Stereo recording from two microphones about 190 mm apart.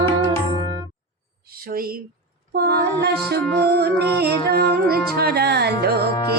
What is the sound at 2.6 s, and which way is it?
Music, 60° right (ahead or behind).